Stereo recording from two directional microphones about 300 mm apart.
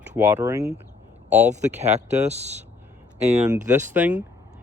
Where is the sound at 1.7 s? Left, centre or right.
Right.